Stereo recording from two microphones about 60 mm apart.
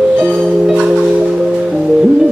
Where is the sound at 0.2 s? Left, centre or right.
Right.